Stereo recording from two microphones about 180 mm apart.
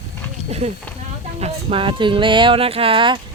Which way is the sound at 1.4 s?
35° right (ahead or behind).